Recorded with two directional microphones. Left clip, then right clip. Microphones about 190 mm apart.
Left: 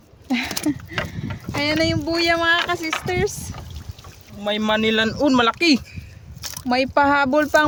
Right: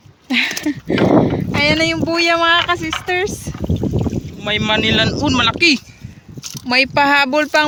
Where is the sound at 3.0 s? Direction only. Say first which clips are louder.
Right 5 dB; 45° right (ahead or behind).